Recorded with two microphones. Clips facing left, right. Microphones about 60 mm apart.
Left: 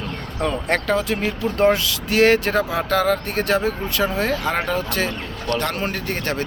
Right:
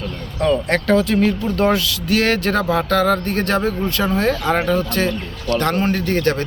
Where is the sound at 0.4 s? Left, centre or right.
Centre.